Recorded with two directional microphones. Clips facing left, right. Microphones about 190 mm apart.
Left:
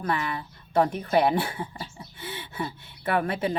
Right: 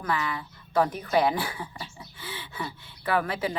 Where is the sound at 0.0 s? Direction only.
30° left (ahead or behind).